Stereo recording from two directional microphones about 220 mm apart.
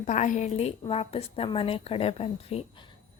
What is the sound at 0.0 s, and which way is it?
A woman's voice, 35° left (ahead or behind).